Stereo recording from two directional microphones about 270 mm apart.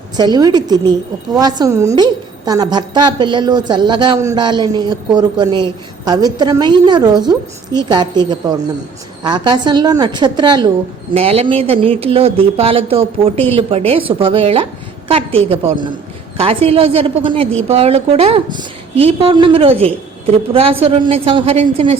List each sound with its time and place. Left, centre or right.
0.2 s a woman's voice: centre